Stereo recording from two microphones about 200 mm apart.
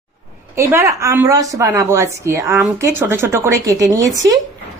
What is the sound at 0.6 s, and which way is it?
A woman's voice, 15° right (ahead or behind).